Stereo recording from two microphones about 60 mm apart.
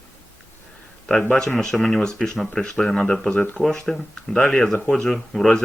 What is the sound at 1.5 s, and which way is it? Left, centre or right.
Speech, centre.